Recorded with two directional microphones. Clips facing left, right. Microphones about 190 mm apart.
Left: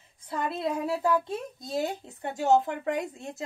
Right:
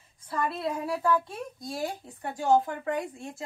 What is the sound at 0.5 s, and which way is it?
A woman's voice, 25° left (ahead or behind).